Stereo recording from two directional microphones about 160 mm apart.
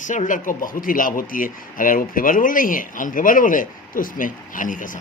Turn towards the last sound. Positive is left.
turn(degrees=55)  # may be behind; listen again after turning